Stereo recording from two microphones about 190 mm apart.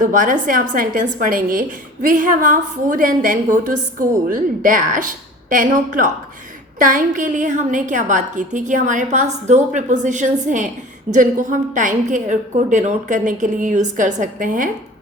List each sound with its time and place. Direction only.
0.0 s a woman's voice: 45° right (ahead or behind)